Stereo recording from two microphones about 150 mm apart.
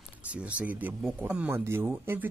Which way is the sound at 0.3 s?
10° right (ahead or behind).